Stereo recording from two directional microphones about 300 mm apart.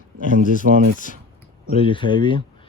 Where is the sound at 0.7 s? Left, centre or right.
Right.